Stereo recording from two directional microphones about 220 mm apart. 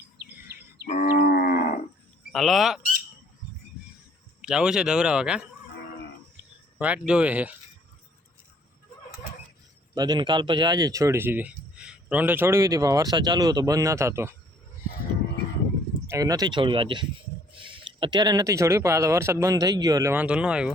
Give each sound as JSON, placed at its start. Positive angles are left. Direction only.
{"t": 0.9, "sound": "livestock", "side_deg": 40}
{"t": 2.3, "sound": "speech", "side_deg": 0}
{"t": 4.4, "sound": "speech", "side_deg": -5}
{"t": 6.7, "sound": "speech", "side_deg": -5}
{"t": 9.9, "sound": "speech", "side_deg": -20}
{"t": 16.0, "sound": "speech", "side_deg": -15}
{"t": 17.6, "sound": "a sound", "side_deg": -20}
{"t": 18.0, "sound": "speech", "side_deg": -20}